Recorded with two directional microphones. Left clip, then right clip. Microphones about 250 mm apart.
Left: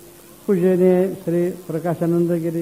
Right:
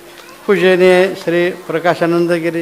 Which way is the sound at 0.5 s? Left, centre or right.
Centre.